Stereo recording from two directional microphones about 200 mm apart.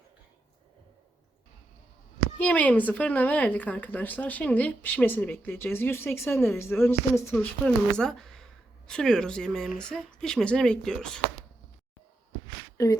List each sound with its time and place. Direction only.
2.4 s a woman's voice: 5° left (ahead or behind)
12.7 s speech: 15° left (ahead or behind)